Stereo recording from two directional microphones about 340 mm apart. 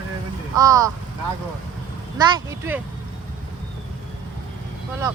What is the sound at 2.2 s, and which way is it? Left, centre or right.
Speech, centre.